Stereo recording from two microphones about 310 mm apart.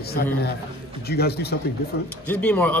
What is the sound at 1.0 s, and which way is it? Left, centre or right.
Speech, left.